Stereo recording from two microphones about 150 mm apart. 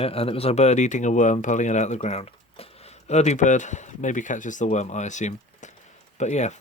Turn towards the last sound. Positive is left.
turn(degrees=50)  # may be behind; listen again after turning